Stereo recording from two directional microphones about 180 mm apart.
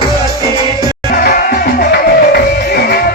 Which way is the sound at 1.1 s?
55° left (ahead or behind).